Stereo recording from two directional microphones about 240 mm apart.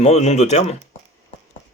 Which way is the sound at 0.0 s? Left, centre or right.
Left.